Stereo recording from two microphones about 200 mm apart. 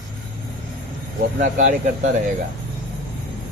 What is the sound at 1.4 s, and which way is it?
Speech, 40° right (ahead or behind).